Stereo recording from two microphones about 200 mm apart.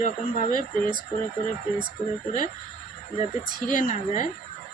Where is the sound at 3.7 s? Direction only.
40° left (ahead or behind).